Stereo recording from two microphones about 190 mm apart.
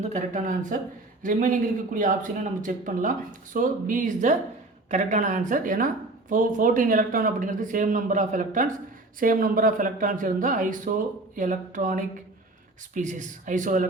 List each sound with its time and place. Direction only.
0.0 s speech: 40° right (ahead or behind)